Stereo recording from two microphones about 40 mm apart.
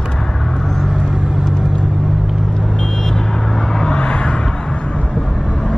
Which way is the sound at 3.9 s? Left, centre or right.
Left.